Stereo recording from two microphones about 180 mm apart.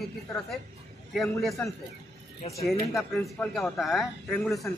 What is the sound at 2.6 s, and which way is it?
Speech, centre (ahead or behind).